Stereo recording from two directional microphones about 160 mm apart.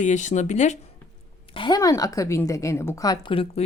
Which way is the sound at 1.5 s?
30° left (ahead or behind).